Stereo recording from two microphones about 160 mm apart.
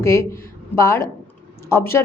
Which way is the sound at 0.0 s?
15° left (ahead or behind).